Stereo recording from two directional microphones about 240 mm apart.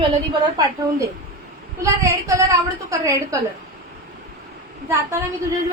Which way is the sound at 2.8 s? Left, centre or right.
Centre.